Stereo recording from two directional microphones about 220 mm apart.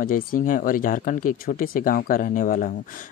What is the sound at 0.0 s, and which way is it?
Speech, 40° left (ahead or behind).